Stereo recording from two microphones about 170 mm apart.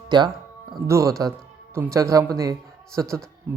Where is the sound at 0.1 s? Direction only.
25° right (ahead or behind).